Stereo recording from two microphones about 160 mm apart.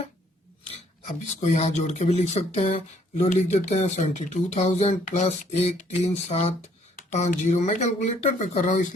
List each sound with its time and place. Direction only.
1.4 s speech: 40° left (ahead or behind)